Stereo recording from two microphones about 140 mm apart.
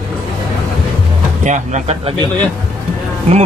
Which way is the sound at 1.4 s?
55° right (ahead or behind).